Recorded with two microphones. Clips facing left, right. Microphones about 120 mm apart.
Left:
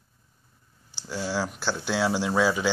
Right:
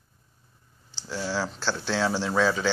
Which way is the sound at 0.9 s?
15° left (ahead or behind).